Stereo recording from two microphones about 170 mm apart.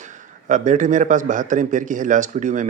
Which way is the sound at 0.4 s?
45° right (ahead or behind).